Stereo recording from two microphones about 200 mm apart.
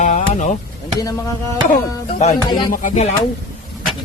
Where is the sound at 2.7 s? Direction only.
40° left (ahead or behind).